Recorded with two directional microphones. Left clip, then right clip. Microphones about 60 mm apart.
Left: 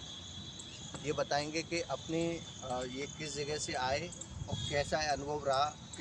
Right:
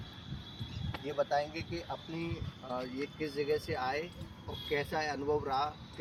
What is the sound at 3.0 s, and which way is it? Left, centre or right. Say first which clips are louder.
Speech: right 3 dB; left.